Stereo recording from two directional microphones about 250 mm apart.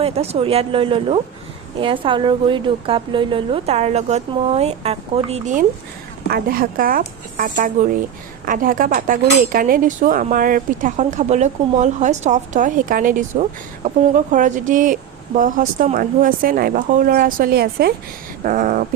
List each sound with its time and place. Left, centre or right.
0.0 s a woman's voice: right